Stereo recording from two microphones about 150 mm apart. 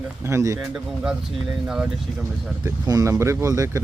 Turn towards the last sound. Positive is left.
turn(degrees=-20)  # may be behind; listen again after turning